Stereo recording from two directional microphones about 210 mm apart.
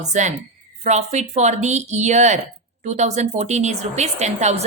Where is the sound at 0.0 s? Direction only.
35° right (ahead or behind).